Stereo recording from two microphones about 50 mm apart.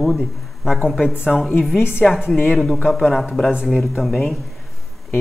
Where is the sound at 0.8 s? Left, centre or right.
Centre.